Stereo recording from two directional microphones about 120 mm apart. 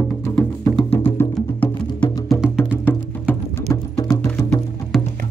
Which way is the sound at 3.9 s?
30° left (ahead or behind).